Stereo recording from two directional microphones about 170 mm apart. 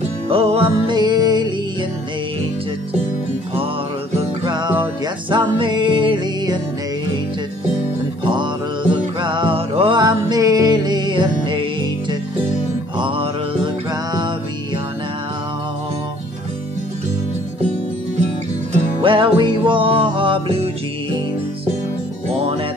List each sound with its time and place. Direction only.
0.3 s music: 35° right (ahead or behind)
4.5 s music: 25° right (ahead or behind)
8.2 s music: 30° right (ahead or behind)
18.9 s music: 30° right (ahead or behind)